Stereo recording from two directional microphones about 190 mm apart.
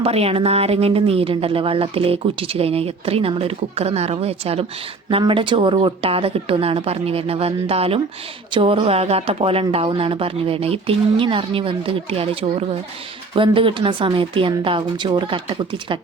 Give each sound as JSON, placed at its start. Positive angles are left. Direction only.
{"t": 0.0, "sound": "a woman's voice", "side_deg": -30}